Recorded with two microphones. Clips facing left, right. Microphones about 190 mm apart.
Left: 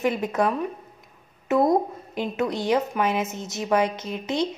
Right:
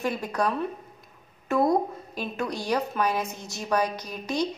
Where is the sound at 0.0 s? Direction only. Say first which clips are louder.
Left 4 dB; 20° left (ahead or behind).